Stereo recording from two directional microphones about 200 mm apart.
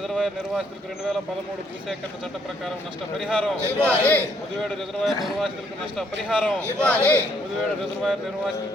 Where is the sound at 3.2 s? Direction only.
Centre (ahead or behind).